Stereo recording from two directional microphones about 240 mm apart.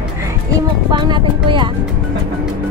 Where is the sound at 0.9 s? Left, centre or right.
Centre.